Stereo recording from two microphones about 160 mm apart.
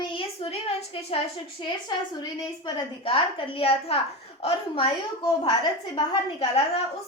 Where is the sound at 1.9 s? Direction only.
25° left (ahead or behind).